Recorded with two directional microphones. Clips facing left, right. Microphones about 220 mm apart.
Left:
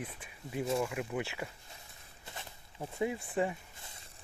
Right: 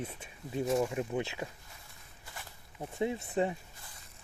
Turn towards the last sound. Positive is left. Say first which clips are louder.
# right 1 dB
turn(degrees=-25)  # may be behind; listen again after turning